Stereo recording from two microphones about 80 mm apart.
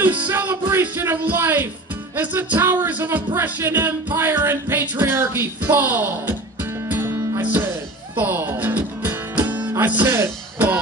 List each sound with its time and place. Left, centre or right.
0.3 s music: right